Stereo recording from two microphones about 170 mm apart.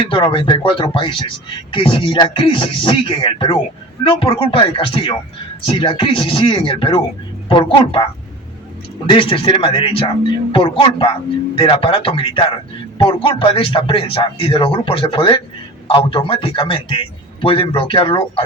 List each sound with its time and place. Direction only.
0.0 s speech: 30° left (ahead or behind)